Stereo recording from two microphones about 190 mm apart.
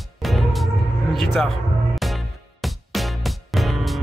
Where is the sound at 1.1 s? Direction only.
Centre (ahead or behind).